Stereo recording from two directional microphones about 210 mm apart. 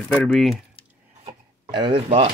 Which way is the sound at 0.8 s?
25° left (ahead or behind).